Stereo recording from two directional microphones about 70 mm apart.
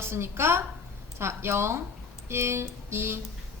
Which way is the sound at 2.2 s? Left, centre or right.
Right.